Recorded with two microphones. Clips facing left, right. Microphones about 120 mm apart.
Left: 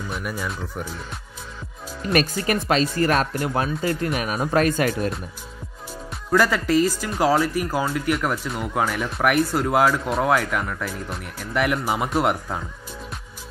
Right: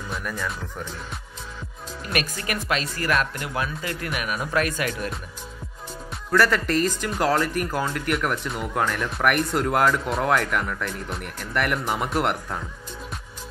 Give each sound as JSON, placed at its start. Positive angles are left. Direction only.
{"t": 0.1, "sound": "speech", "side_deg": 10}
{"t": 2.1, "sound": "speech", "side_deg": 30}
{"t": 6.3, "sound": "speech", "side_deg": 10}